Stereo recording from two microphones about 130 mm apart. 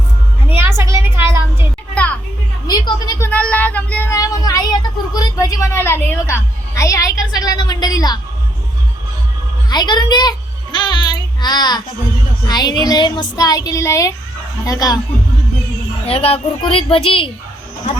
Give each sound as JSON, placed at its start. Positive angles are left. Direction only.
{"t": 0.4, "sound": "a sound", "side_deg": -20}
{"t": 2.6, "sound": "a woman's voice", "side_deg": 30}
{"t": 3.2, "sound": "speech", "side_deg": 10}
{"t": 4.1, "sound": "a sound", "side_deg": 30}
{"t": 5.1, "sound": "a child's voice", "side_deg": 30}
{"t": 9.6, "sound": "child singing", "side_deg": 35}
{"t": 12.5, "sound": "a child's voice", "side_deg": 30}
{"t": 16.0, "sound": "a woman's voice", "side_deg": 50}